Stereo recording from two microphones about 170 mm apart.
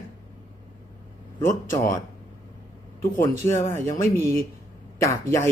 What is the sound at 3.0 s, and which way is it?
Speech, 15° left (ahead or behind).